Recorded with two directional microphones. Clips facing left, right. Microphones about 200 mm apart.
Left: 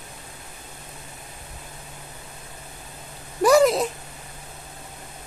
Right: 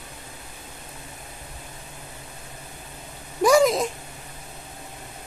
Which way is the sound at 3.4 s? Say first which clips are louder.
Left 1 dB; 5° left (ahead or behind).